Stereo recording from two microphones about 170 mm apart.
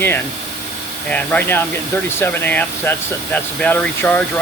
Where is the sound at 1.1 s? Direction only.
10° left (ahead or behind).